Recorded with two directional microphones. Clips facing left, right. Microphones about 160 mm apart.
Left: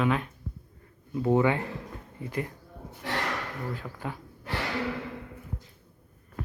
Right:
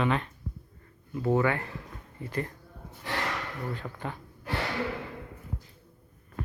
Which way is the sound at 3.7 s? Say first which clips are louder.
Even; 5° left (ahead or behind).